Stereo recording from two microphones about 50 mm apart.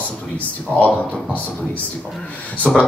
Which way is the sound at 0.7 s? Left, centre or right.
Left.